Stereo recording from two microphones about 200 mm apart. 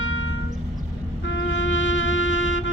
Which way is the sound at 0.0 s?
80° left.